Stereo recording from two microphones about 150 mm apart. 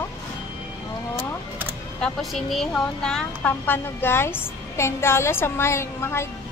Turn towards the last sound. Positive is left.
turn(degrees=15)  # may be behind; listen again after turning